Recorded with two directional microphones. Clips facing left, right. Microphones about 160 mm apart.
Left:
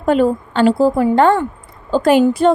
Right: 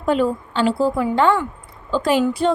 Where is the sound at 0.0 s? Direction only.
55° left (ahead or behind).